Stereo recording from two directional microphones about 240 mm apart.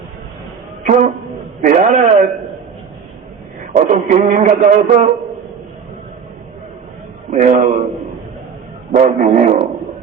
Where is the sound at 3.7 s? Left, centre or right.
Right.